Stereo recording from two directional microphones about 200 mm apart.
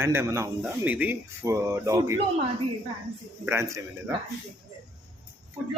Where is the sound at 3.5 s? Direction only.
15° right (ahead or behind).